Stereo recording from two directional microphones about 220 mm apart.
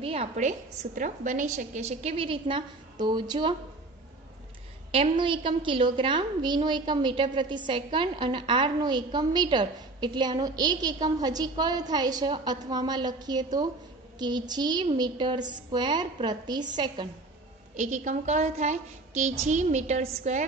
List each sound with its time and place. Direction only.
0.0 s a woman's voice: 25° right (ahead or behind)
4.9 s a woman's voice: 25° right (ahead or behind)
17.7 s a woman's voice: 35° right (ahead or behind)